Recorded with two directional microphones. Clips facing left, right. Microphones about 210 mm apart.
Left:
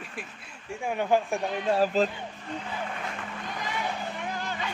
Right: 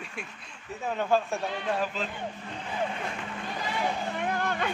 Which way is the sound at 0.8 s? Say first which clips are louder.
Left 1 dB; 15° left (ahead or behind).